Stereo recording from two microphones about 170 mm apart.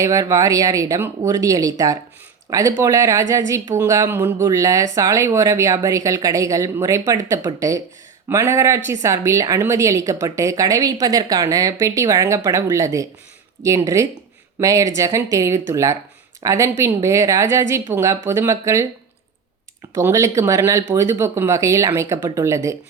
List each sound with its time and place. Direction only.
0.0 s speech: 20° right (ahead or behind)
19.9 s speech: 15° right (ahead or behind)